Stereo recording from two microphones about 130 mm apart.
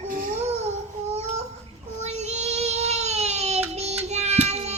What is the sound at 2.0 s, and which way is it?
Child singing, 55° right (ahead or behind).